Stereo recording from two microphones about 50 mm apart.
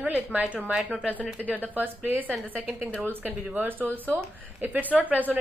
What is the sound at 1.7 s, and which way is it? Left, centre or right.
A woman's voice, right.